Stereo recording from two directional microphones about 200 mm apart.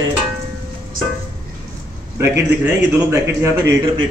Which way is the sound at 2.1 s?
15° right (ahead or behind).